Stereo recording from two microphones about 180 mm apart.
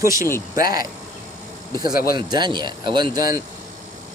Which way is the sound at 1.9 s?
55° left (ahead or behind).